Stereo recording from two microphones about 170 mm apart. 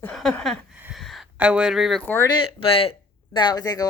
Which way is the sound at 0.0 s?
5° left (ahead or behind).